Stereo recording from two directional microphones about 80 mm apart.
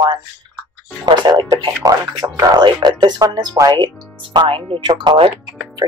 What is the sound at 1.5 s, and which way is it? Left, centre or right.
Speech, right.